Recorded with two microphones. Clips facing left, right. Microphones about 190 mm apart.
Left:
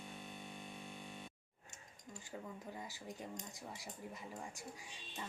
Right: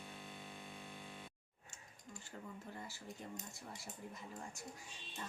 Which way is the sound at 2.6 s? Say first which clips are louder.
Left 2 dB; 15° left (ahead or behind).